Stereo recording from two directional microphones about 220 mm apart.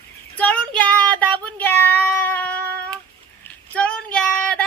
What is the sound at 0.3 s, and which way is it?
Child singing, 5° left (ahead or behind).